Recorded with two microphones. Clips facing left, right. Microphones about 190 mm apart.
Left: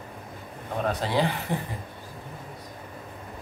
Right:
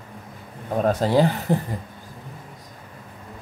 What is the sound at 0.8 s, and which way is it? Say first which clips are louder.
Speech: right 7 dB; 40° right (ahead or behind).